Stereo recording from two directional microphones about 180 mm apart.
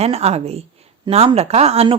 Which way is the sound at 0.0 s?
35° right (ahead or behind).